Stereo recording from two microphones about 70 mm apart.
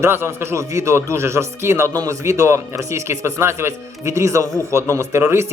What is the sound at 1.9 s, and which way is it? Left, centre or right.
Speech, right.